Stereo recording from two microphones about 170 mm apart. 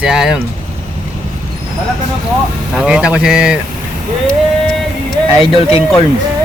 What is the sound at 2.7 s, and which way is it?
Speech, 5° right (ahead or behind).